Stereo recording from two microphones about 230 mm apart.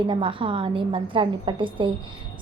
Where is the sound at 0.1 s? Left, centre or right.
Right.